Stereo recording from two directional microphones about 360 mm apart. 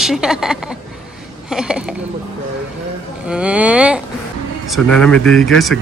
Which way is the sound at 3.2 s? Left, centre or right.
Centre.